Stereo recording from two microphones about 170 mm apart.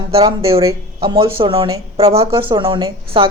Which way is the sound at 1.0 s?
35° right (ahead or behind).